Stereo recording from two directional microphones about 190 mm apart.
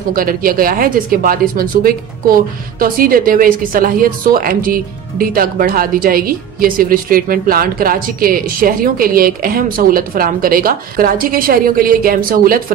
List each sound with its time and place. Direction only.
0.1 s speech: 50° right (ahead or behind)